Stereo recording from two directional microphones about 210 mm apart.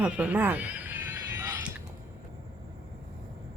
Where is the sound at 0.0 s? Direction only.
5° right (ahead or behind).